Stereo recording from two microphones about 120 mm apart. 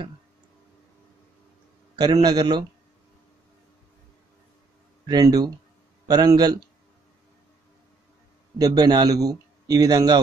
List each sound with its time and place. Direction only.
2.0 s a man's voice: 35° right (ahead or behind)
5.0 s a man's voice: 35° right (ahead or behind)
8.5 s a man's voice: 30° right (ahead or behind)